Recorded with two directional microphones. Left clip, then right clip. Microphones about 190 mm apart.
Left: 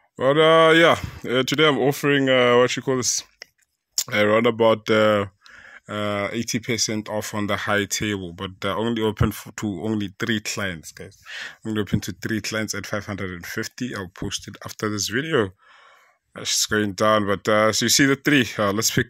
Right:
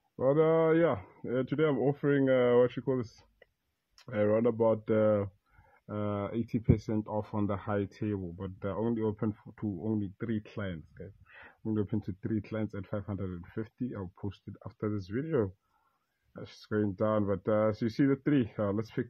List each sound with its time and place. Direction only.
0.2 s speech: 30° left (ahead or behind)
4.1 s speech: 35° left (ahead or behind)
5.9 s speech: 20° left (ahead or behind); by 11.7 s 35° left (ahead or behind)
11.7 s speech: 25° left (ahead or behind)
14.6 s speech: 40° left (ahead or behind)
15.0 s speech: 25° left (ahead or behind)